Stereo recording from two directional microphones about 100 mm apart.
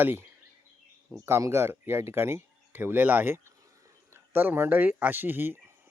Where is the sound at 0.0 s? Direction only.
20° right (ahead or behind).